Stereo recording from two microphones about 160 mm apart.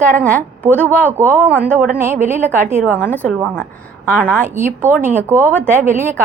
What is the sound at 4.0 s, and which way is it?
A woman's voice, 15° right (ahead or behind).